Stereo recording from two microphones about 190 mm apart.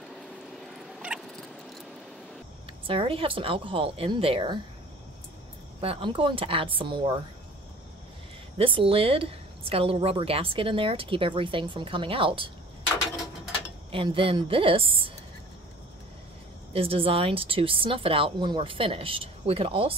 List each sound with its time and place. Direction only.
0.6 s a sound: 5° right (ahead or behind)
2.9 s a woman's voice: 30° right (ahead or behind)
5.8 s a woman's voice: 30° right (ahead or behind)
8.5 s a woman's voice: 30° right (ahead or behind)
13.9 s a woman's voice: 25° right (ahead or behind)
16.7 s a woman's voice: 30° right (ahead or behind)